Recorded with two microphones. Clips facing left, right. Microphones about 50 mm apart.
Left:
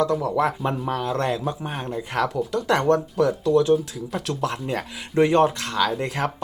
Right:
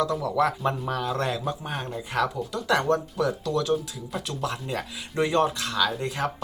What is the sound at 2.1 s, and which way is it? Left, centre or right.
Speech, left.